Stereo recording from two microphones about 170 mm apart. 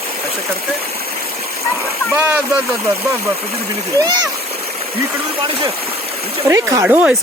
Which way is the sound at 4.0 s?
25° right (ahead or behind).